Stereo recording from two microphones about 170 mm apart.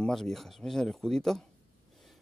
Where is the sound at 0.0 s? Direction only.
Centre (ahead or behind).